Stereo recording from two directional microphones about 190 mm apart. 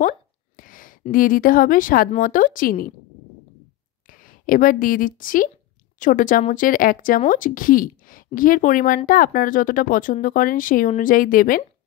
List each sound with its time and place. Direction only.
0.6 s a sound: 45° left (ahead or behind)
1.1 s speech: 45° left (ahead or behind)
4.1 s a woman's voice: 45° left (ahead or behind)